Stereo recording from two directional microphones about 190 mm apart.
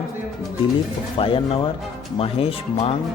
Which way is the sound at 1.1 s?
30° left (ahead or behind).